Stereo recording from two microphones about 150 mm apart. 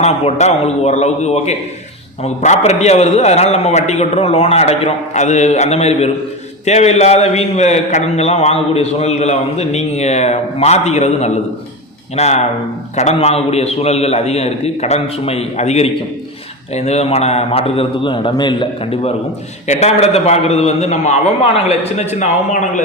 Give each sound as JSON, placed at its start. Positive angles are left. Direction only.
{"t": 0.0, "sound": "a man's voice", "side_deg": 45}
{"t": 19.6, "sound": "a man's voice", "side_deg": 50}
{"t": 22.1, "sound": "a man's voice", "side_deg": 55}